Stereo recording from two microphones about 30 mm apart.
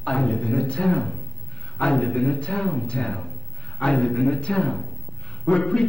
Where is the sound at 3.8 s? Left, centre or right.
Left.